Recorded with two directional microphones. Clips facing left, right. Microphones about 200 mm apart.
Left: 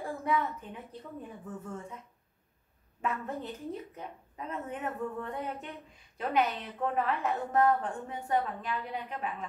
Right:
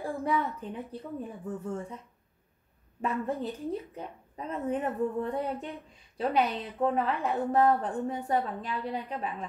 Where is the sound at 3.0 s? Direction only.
35° right (ahead or behind).